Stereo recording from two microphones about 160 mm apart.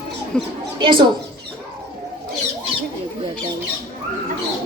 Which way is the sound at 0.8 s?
30° right (ahead or behind).